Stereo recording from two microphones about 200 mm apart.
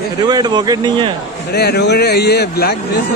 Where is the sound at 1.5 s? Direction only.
55° left (ahead or behind).